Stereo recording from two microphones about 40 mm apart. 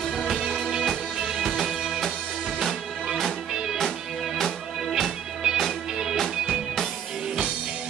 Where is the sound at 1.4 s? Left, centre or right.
Centre.